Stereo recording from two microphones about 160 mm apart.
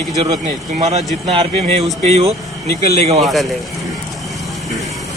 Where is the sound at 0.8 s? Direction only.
45° right (ahead or behind).